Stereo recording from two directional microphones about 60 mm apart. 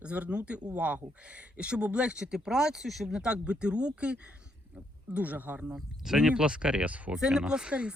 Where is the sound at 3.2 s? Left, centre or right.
Centre.